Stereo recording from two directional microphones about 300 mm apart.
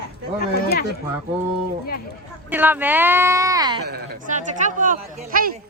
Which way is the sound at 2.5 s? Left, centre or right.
Centre.